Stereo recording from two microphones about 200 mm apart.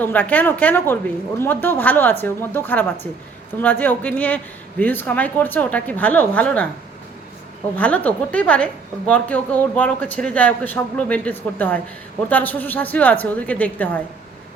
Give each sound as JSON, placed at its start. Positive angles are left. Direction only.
{"t": 0.0, "sound": "a woman's voice", "side_deg": 10}
{"t": 7.8, "sound": "a woman's voice", "side_deg": 5}